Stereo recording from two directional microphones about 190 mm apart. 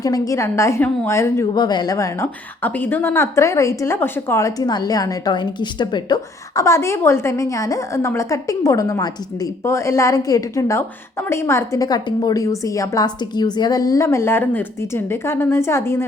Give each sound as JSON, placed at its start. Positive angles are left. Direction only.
{"t": 0.0, "sound": "a woman's voice", "side_deg": 20}